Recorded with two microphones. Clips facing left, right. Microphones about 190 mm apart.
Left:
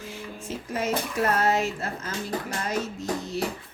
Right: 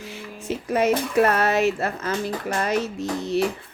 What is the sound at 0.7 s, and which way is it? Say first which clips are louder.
Speech: right 7 dB; 65° right (ahead or behind).